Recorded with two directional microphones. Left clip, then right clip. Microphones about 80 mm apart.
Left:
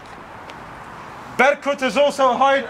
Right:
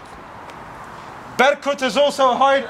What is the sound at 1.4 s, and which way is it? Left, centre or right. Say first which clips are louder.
A man's voice: even; centre.